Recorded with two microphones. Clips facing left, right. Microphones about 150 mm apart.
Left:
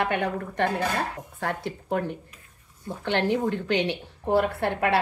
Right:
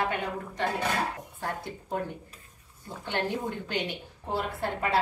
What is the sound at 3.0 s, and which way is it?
A woman's voice, 85° left.